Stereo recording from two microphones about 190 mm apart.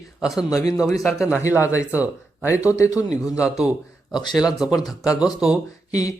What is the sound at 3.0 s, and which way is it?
Speech, 5° right (ahead or behind).